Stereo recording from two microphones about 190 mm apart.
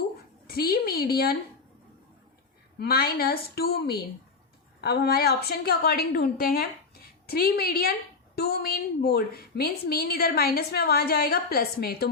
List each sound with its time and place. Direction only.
0.4 s a woman's voice: 55° left (ahead or behind)
2.7 s a woman's voice: 55° left (ahead or behind)